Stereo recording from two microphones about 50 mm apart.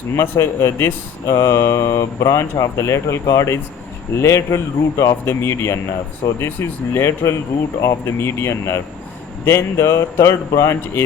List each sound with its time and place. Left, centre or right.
0.2 s speech: left
1.3 s speech: left
7.8 s speech: left